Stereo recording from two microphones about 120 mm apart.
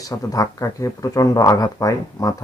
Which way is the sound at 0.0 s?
30° left (ahead or behind).